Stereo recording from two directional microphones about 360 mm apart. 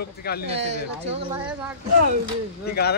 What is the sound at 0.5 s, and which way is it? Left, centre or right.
Speech, centre.